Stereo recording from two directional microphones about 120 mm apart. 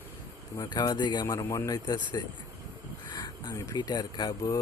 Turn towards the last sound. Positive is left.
turn(degrees=30)  # may be behind; listen again after turning